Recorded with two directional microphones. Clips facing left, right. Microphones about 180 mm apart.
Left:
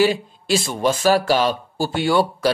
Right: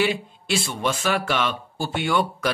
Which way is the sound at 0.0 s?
35° left (ahead or behind).